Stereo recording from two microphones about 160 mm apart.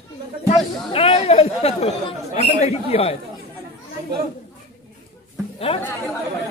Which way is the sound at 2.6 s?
40° left (ahead or behind).